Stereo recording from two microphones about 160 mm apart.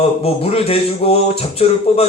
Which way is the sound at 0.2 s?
40° left (ahead or behind).